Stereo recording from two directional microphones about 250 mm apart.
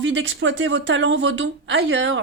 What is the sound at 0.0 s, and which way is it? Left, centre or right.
Speech, right.